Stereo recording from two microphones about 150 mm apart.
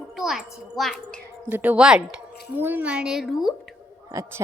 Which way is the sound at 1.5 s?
10° right (ahead or behind).